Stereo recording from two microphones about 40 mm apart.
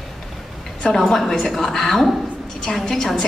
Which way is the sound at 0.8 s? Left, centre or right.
Left.